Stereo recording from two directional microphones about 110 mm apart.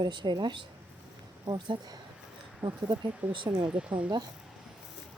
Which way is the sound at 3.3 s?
45° right (ahead or behind).